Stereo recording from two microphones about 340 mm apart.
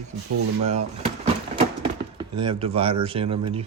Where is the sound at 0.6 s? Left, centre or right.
Centre.